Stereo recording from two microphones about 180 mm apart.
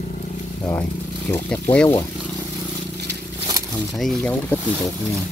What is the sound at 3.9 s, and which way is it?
Speech, centre (ahead or behind).